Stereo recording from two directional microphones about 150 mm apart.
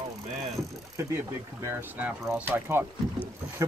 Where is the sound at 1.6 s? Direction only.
10° right (ahead or behind).